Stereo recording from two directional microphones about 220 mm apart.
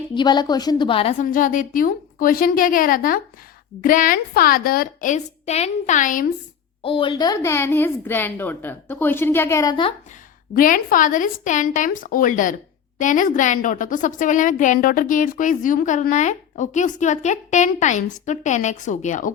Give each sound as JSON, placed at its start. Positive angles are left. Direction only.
{"t": 0.1, "sound": "a woman's voice", "side_deg": 20}
{"t": 1.2, "sound": "a woman's voice", "side_deg": 40}
{"t": 6.8, "sound": "a woman's voice", "side_deg": 25}
{"t": 10.5, "sound": "a woman's voice", "side_deg": 40}